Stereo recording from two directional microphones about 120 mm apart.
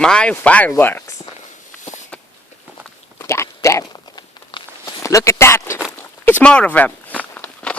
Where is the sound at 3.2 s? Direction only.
25° left (ahead or behind).